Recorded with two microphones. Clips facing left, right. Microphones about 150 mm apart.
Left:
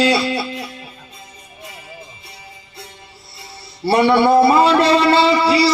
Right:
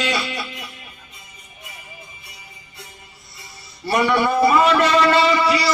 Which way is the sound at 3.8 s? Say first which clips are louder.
Left 5 dB; 30° left (ahead or behind).